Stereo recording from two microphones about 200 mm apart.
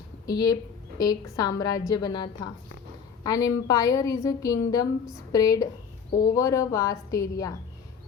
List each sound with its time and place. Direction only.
0.3 s a woman's voice: 20° left (ahead or behind)